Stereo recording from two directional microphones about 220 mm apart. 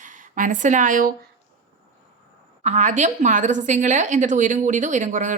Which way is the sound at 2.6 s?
30° right (ahead or behind).